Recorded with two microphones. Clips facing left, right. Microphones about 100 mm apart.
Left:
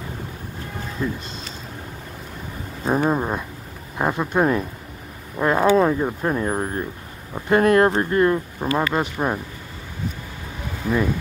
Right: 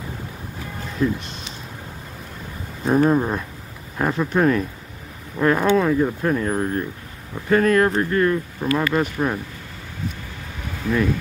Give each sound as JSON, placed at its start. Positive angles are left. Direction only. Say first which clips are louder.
{"t": 1.0, "sound": "speech", "louder": "right 5 dB", "side_deg": 10}
{"t": 2.8, "sound": "speech", "louder": "right 3 dB", "side_deg": 5}
{"t": 10.8, "sound": "speech", "louder": "even", "side_deg": 15}